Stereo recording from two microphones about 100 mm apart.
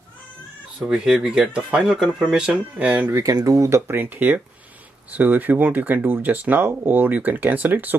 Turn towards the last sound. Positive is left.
turn(degrees=-20)  # may be behind; listen again after turning